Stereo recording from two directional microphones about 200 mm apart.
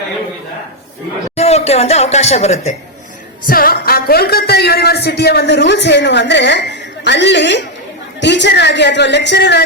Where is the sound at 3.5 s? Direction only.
45° left (ahead or behind).